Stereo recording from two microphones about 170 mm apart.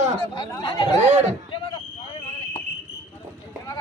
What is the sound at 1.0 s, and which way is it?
Speech, 40° right (ahead or behind).